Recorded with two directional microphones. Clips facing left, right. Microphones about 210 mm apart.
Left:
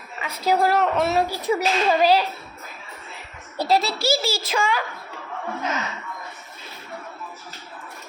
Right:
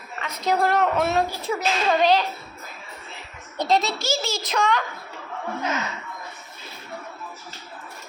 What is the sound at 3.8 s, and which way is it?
Speech, 30° left (ahead or behind).